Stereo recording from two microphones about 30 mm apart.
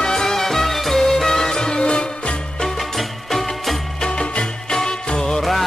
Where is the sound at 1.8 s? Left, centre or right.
Left.